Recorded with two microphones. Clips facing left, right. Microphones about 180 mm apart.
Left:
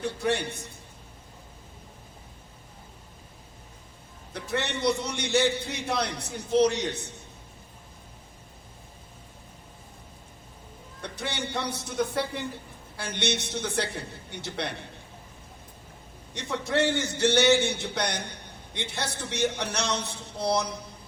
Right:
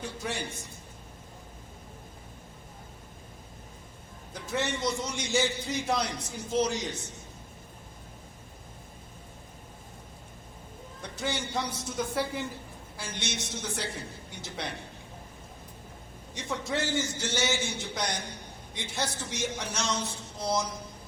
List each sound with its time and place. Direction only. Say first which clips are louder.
0.0 s a man's voice: left 7 dB; 65° left (ahead or behind)
4.4 s a man's voice: left 1 dB; 65° left (ahead or behind)
11.0 s a man's voice: even; 65° left (ahead or behind)
16.3 s a man's voice: left 4 dB; 65° left (ahead or behind)